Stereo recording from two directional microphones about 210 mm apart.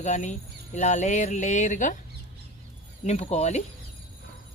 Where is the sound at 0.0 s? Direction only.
35° left (ahead or behind).